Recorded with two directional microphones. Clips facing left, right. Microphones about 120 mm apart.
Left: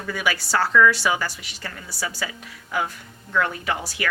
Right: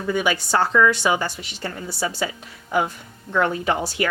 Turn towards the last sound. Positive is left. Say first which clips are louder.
# right 5 dB
turn(degrees=-25)  # may be behind; listen again after turning